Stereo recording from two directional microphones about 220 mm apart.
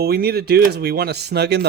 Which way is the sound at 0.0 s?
45° right (ahead or behind).